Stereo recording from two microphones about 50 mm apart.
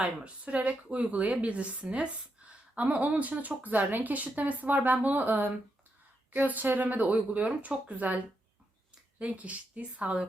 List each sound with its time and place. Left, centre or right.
0.0 s a woman's voice: right